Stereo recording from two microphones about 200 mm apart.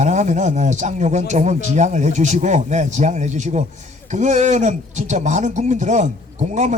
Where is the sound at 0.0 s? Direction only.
35° right (ahead or behind).